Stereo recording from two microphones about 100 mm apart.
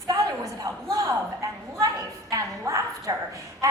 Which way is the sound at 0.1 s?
40° right (ahead or behind).